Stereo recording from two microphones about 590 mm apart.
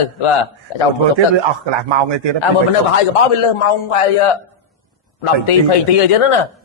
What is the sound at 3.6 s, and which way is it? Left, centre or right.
A man's voice, left.